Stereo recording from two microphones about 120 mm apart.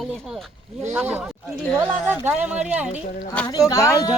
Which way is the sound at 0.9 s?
15° right (ahead or behind).